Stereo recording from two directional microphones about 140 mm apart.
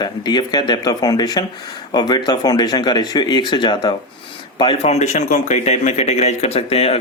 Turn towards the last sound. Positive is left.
turn(degrees=45)  # may be behind; listen again after turning